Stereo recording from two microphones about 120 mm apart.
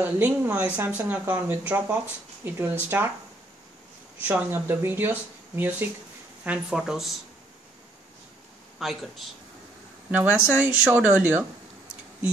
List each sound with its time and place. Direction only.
0.0 s speech: 15° right (ahead or behind)
4.2 s speech: 15° right (ahead or behind)
8.7 s speech: centre (ahead or behind)
10.1 s speech: 10° right (ahead or behind)